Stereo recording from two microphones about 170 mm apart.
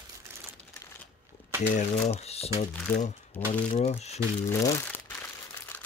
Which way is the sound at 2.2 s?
35° left (ahead or behind).